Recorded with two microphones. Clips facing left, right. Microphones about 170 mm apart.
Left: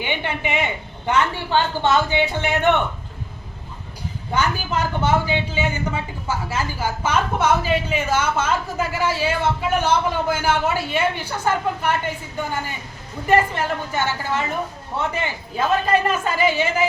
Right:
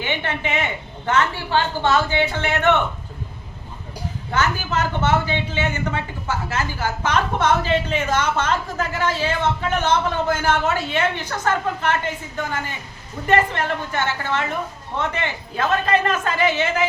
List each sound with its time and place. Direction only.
0.0 s a woman's voice: 15° left (ahead or behind)
4.3 s a man's voice: 15° left (ahead or behind)
13.2 s a man's voice: 5° left (ahead or behind)